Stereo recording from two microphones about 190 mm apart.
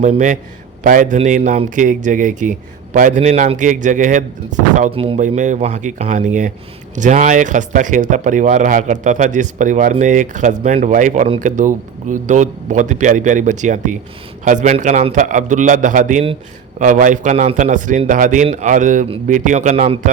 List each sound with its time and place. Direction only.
0.0 s speech: 40° right (ahead or behind)
4.9 s speech: 30° right (ahead or behind)
5.2 s speech: 40° right (ahead or behind)